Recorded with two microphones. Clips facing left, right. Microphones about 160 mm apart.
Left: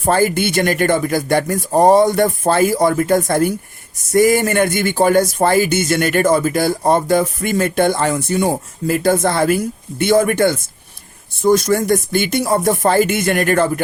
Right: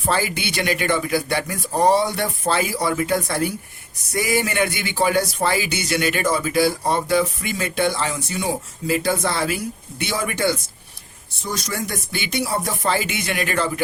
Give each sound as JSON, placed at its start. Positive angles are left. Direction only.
{"t": 0.0, "sound": "speech", "side_deg": 50}